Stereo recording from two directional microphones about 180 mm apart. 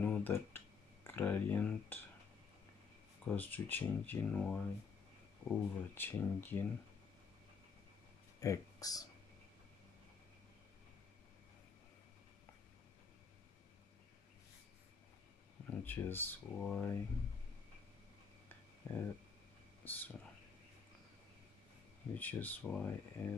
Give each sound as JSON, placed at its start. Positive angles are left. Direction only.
{"t": 0.0, "sound": "a sound", "side_deg": 10}
{"t": 1.0, "sound": "speech", "side_deg": 10}
{"t": 3.3, "sound": "speech", "side_deg": 10}
{"t": 8.4, "sound": "speech", "side_deg": 20}
{"t": 15.6, "sound": "speech", "side_deg": 10}
{"t": 18.8, "sound": "speech", "side_deg": 15}
{"t": 22.1, "sound": "speech", "side_deg": 10}